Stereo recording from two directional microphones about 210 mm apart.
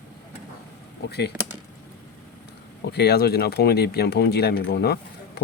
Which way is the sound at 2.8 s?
50° left (ahead or behind).